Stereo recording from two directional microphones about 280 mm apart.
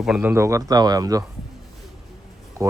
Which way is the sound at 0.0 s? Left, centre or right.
Centre.